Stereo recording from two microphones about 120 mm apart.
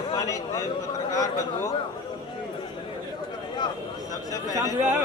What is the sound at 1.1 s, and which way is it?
Speech, 30° left (ahead or behind).